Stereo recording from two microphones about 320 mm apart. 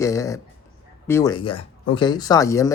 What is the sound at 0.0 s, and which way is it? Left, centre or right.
Speech, centre.